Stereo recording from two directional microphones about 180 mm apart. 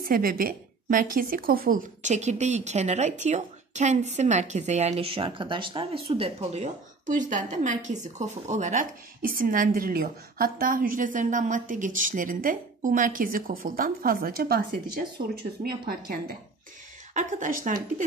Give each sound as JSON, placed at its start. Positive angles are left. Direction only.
{"t": 0.0, "sound": "a woman's voice", "side_deg": -55}
{"t": 17.1, "sound": "a woman's voice", "side_deg": -45}